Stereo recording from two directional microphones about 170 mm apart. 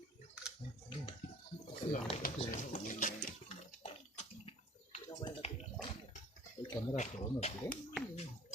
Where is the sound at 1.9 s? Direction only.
55° left (ahead or behind).